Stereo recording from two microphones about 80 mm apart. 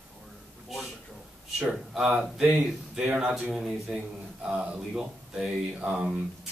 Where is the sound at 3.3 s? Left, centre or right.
Centre.